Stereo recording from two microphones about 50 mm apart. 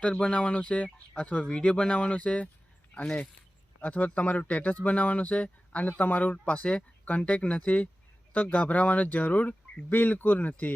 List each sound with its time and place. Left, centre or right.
0.0 s speech: left
3.8 s speech: left